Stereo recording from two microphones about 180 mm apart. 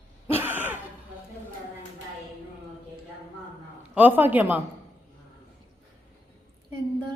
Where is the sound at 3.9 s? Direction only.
10° right (ahead or behind).